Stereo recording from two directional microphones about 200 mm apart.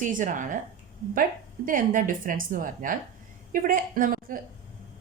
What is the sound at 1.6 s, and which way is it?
A woman's voice, 45° right (ahead or behind).